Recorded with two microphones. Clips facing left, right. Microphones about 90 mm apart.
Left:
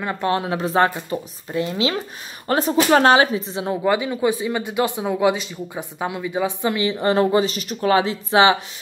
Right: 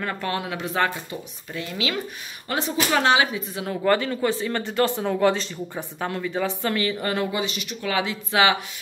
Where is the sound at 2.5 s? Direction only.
45° left (ahead or behind); by 3.9 s 25° left (ahead or behind).